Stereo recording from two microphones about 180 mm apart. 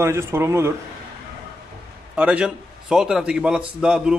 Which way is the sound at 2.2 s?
5° right (ahead or behind).